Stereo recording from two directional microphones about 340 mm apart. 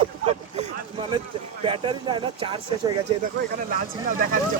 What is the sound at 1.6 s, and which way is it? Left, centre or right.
Speech, centre.